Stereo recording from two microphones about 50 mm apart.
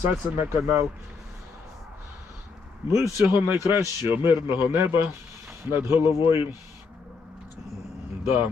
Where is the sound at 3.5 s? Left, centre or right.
Right.